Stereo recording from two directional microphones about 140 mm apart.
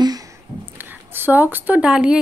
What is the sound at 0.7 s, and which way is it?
Speech, 15° right (ahead or behind).